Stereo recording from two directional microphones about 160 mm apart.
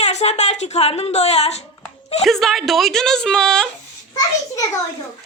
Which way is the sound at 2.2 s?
Centre (ahead or behind).